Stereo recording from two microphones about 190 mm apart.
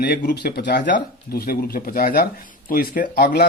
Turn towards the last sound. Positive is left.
turn(degrees=50)  # may be behind; listen again after turning